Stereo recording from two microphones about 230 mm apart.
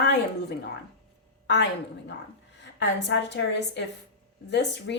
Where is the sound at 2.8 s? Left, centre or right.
Left.